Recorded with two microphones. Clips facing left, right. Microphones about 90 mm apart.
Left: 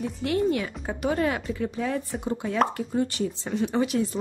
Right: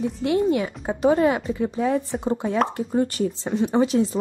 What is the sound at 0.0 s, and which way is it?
Speech, 20° right (ahead or behind).